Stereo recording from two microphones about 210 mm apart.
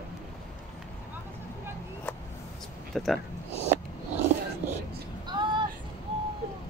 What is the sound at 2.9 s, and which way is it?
Speech, centre (ahead or behind).